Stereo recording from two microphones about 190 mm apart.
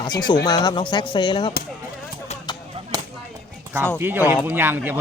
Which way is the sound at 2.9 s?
20° right (ahead or behind).